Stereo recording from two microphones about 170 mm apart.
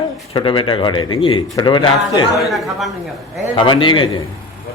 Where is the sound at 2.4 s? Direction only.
Centre (ahead or behind).